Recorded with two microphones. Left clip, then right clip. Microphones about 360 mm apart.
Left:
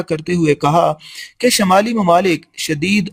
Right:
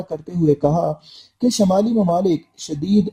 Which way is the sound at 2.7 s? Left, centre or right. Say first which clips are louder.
Left 4 dB; left.